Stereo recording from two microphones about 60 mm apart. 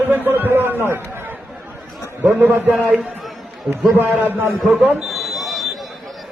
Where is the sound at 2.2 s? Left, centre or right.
Right.